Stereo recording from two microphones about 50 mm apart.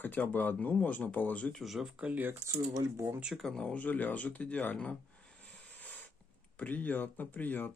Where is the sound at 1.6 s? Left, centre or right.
Centre.